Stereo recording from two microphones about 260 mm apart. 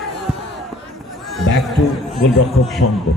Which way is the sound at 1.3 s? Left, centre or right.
Centre.